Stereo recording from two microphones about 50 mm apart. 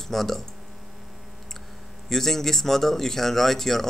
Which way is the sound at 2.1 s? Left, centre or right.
Centre.